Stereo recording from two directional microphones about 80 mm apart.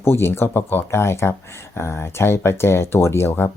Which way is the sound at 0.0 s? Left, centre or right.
Left.